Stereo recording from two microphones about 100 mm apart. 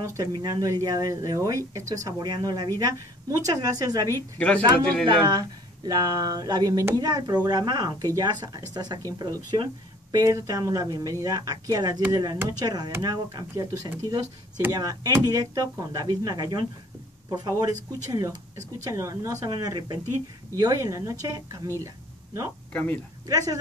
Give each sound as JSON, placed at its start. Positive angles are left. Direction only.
{"t": 0.0, "sound": "speech", "side_deg": -30}
{"t": 0.3, "sound": "speech", "side_deg": -45}
{"t": 4.1, "sound": "a woman's voice", "side_deg": 15}
{"t": 5.0, "sound": "speech", "side_deg": -45}
{"t": 10.1, "sound": "speech", "side_deg": -35}
{"t": 19.5, "sound": "speech", "side_deg": -45}
{"t": 21.8, "sound": "a sound", "side_deg": -30}
{"t": 22.7, "sound": "speech", "side_deg": 15}
{"t": 23.2, "sound": "speech", "side_deg": -35}